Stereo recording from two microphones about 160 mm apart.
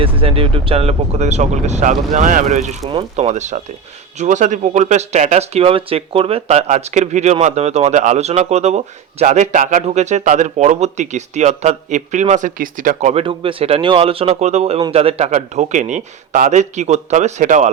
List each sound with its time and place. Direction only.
0.0 s speech: 35° right (ahead or behind)